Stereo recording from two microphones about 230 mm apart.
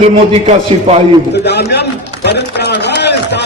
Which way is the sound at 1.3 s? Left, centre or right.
Left.